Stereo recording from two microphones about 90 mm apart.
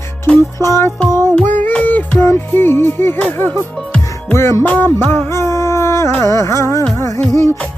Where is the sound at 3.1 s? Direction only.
20° left (ahead or behind).